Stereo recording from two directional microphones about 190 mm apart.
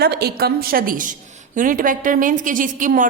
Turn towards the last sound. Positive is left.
turn(degrees=-45)  # may be behind; listen again after turning